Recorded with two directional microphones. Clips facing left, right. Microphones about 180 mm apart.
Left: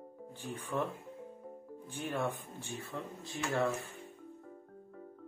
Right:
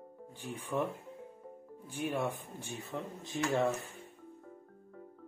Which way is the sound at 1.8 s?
10° right (ahead or behind).